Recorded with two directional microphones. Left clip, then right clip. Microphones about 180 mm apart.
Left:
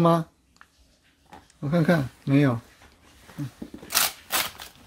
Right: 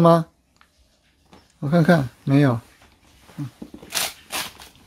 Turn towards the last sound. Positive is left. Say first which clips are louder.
# left 1 dB
turn(degrees=20)  # may be behind; listen again after turning